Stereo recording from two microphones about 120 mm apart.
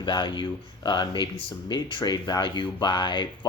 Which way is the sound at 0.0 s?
40° left (ahead or behind).